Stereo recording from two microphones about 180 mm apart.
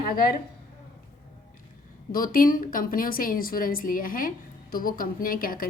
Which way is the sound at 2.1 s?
50° left (ahead or behind).